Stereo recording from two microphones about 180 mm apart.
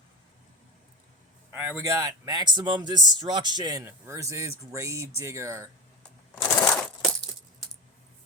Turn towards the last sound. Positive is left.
turn(degrees=5)  # may be behind; listen again after turning